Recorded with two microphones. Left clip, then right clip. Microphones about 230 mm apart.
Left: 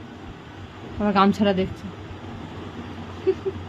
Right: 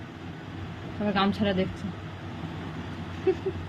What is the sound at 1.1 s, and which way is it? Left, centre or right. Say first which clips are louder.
Speech: left 7 dB; left.